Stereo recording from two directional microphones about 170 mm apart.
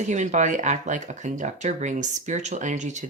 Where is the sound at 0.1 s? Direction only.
45° right (ahead or behind).